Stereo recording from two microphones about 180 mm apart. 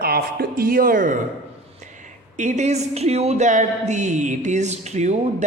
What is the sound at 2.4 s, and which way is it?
Speech, 40° right (ahead or behind).